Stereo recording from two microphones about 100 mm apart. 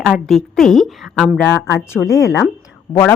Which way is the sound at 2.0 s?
15° left (ahead or behind).